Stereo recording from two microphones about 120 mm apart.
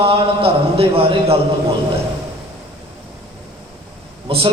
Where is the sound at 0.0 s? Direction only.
50° right (ahead or behind).